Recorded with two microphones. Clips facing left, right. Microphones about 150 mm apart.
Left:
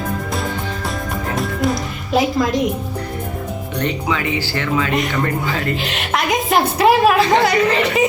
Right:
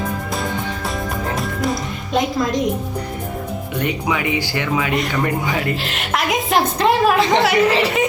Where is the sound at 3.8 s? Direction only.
15° right (ahead or behind).